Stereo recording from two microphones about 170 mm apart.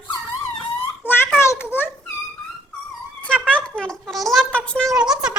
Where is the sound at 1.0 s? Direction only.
10° left (ahead or behind).